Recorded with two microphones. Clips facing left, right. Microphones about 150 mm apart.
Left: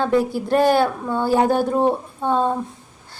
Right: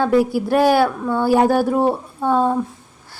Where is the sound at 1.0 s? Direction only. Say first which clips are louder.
Right 3 dB; 15° left (ahead or behind).